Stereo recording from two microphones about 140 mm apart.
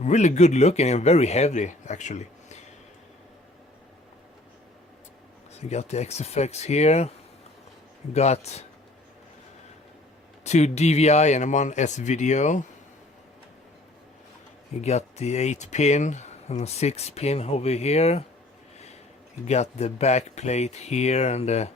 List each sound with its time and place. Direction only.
0.0 s speech: 55° left (ahead or behind)
5.5 s speech: 50° left (ahead or behind)
8.1 s speech: 50° left (ahead or behind)
10.4 s speech: 55° left (ahead or behind)
14.7 s speech: 50° left (ahead or behind)
19.5 s speech: 50° left (ahead or behind)